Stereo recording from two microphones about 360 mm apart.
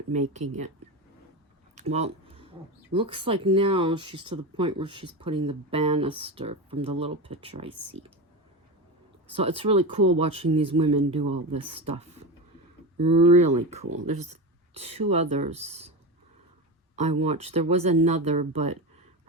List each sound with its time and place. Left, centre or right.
0.1 s speech: centre
1.7 s a sound: centre
2.9 s speech: centre
9.3 s speech: centre
16.9 s speech: centre